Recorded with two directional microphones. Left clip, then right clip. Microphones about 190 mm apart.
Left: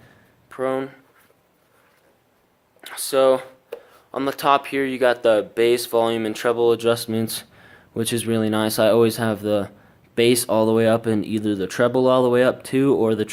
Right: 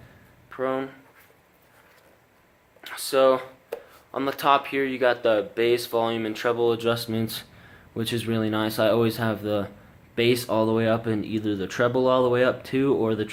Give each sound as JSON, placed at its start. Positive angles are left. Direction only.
{"t": 0.5, "sound": "speech", "side_deg": 40}
{"t": 2.8, "sound": "a sound", "side_deg": 40}
{"t": 4.1, "sound": "speech", "side_deg": 40}